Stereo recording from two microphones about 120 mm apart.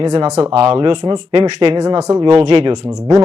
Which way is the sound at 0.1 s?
65° right (ahead or behind).